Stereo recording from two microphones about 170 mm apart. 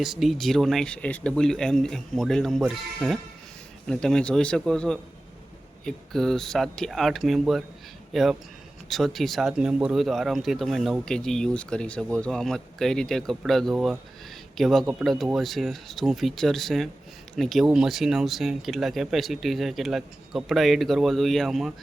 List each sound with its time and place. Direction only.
0.0 s speech: centre (ahead or behind)